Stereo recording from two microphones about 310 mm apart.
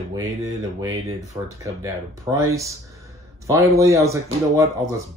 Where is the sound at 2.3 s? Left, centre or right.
Centre.